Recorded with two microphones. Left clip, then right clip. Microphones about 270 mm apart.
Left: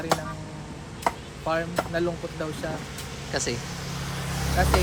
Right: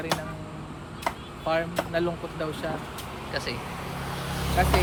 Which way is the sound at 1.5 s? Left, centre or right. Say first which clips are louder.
Right 1 dB; centre.